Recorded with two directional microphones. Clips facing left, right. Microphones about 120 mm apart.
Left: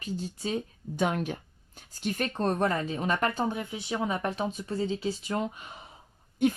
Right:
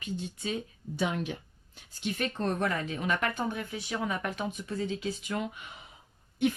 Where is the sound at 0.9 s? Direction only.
50° left (ahead or behind).